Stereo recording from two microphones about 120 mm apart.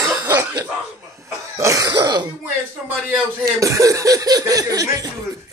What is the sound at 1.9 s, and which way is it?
Speech, 35° right (ahead or behind).